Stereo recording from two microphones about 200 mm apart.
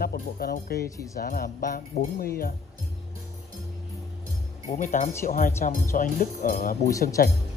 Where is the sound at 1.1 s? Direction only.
45° left (ahead or behind).